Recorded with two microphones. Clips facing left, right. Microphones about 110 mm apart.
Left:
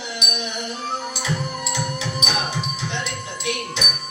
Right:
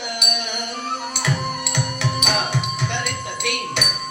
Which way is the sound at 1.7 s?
60° right (ahead or behind).